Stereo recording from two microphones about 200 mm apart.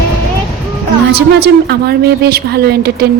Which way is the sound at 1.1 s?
55° right (ahead or behind).